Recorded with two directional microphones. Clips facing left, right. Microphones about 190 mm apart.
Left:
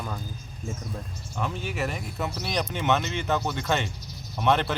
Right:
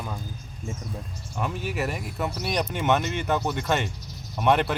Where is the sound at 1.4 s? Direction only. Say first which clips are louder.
Right 1 dB; 5° right (ahead or behind).